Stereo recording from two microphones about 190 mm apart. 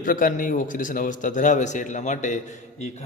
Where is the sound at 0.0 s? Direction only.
45° left (ahead or behind).